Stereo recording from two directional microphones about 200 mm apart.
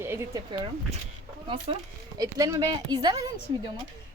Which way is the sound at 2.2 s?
15° right (ahead or behind).